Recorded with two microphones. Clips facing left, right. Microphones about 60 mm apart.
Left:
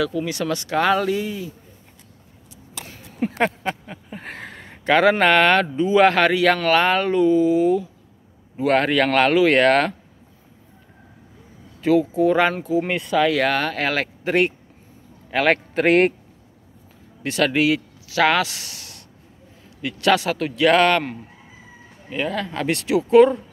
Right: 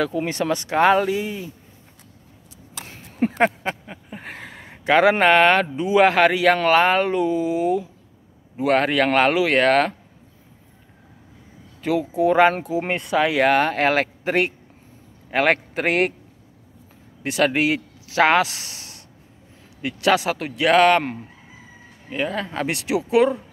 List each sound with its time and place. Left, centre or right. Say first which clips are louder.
0.0 s speech: even; right
1.0 s speech: left 1 dB; centre
2.9 s a sound: right 3 dB; right
3.4 s a sound: right 2 dB; centre
5.2 s speech: right 1 dB; centre
8.5 s speech: left 1 dB; centre
9.5 s speech: left 1 dB; centre
11.9 s speech: left 2 dB; centre
15.5 s speech: left 5 dB; centre
17.2 s speech: even; centre
22.1 s speech: even; centre